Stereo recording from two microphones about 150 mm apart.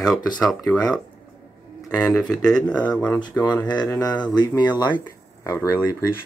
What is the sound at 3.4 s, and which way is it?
Speech, 30° left (ahead or behind).